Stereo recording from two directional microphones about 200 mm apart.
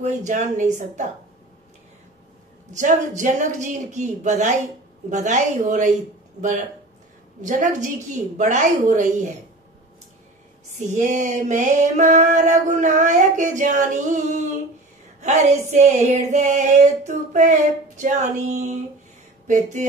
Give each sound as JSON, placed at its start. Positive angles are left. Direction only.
{"t": 0.0, "sound": "female singing", "side_deg": -35}
{"t": 2.7, "sound": "female singing", "side_deg": -40}
{"t": 7.4, "sound": "female singing", "side_deg": -40}
{"t": 10.9, "sound": "female singing", "side_deg": -40}